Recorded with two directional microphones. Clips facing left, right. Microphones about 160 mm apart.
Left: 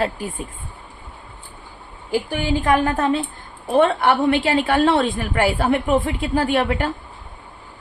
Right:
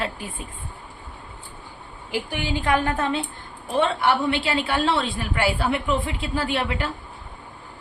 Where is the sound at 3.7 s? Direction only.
55° left (ahead or behind).